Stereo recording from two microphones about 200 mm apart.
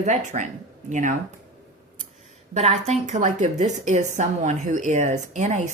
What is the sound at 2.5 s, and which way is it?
Speech, 35° right (ahead or behind).